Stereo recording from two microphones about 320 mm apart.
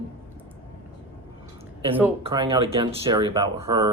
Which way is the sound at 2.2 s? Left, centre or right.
Centre.